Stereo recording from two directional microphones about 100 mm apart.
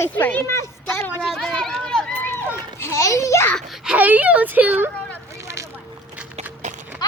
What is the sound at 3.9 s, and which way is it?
Speech, 15° right (ahead or behind).